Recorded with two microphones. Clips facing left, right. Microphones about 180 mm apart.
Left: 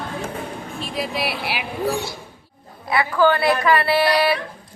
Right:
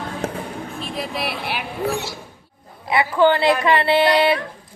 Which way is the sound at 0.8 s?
Centre (ahead or behind).